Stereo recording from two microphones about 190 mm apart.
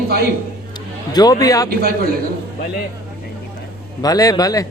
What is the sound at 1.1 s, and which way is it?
Speech, 20° left (ahead or behind).